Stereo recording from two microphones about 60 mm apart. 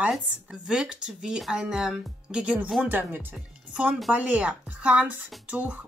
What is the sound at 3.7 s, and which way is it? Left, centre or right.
Speech, centre.